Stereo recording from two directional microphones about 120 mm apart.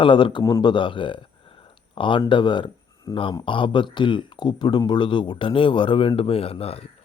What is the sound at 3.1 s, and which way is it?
Speech, 25° left (ahead or behind).